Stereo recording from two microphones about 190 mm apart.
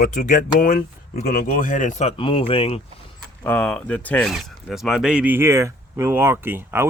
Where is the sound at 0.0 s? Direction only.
45° left (ahead or behind).